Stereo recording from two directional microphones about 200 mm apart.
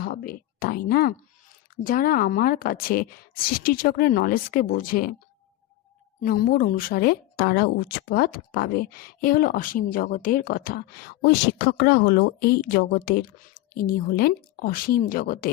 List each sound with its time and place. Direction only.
0.0 s speech: 45° left (ahead or behind)
6.2 s speech: 45° left (ahead or behind)